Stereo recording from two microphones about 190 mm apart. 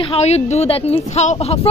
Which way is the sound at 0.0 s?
35° left (ahead or behind).